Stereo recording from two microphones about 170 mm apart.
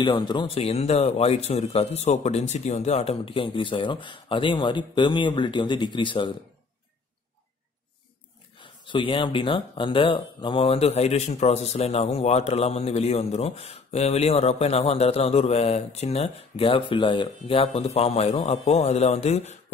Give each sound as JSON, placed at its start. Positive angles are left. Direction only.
{"t": 0.0, "sound": "speech", "side_deg": 25}
{"t": 8.5, "sound": "speech", "side_deg": 30}